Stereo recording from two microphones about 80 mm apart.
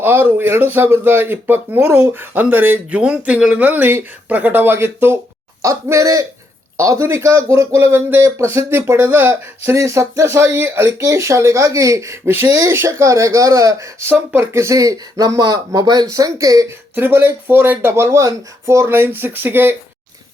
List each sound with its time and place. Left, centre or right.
0.0 s speech: right
3.0 s speech: centre
3.7 s speech: right
5.6 s speech: right
9.7 s speech: right
11.0 s speech: right
14.1 s speech: right
16.6 s speech: right